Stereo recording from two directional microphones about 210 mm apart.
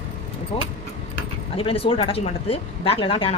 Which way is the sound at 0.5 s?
25° left (ahead or behind).